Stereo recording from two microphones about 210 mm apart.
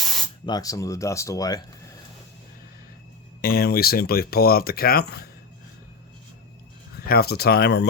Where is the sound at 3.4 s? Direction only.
45° left (ahead or behind).